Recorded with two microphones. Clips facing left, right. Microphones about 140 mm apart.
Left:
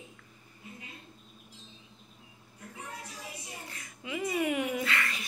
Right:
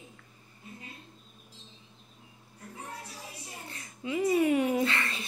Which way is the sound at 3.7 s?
30° right (ahead or behind).